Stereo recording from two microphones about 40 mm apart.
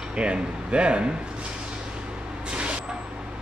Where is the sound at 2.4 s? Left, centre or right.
Right.